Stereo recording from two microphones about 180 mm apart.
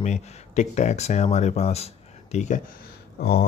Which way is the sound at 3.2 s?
60° left (ahead or behind).